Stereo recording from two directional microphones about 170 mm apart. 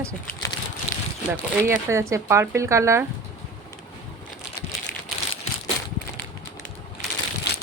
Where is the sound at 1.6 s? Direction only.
15° right (ahead or behind).